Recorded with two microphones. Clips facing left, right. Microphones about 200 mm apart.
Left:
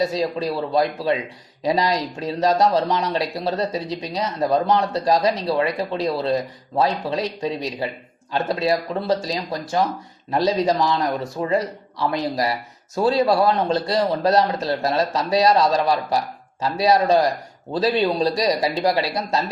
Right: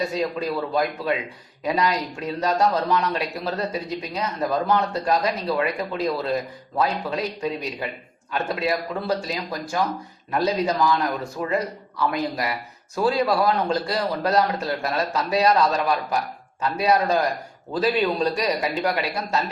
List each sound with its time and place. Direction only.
0.0 s a man's voice: 35° left (ahead or behind)